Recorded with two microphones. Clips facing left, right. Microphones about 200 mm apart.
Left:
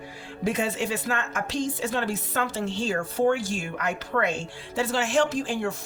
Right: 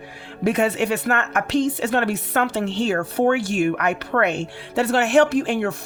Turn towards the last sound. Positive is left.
turn(degrees=-65)  # may be behind; listen again after turning